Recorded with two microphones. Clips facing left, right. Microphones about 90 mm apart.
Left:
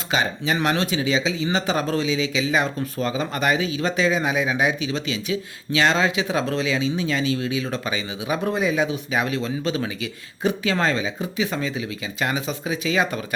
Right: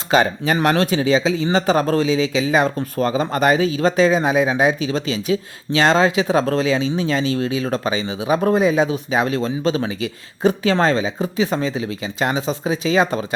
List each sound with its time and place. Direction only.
0.1 s speech: 45° right (ahead or behind)